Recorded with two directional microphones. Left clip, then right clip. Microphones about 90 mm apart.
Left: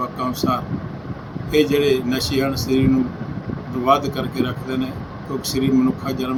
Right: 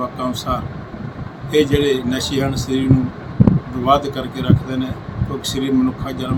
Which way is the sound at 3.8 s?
15° right (ahead or behind).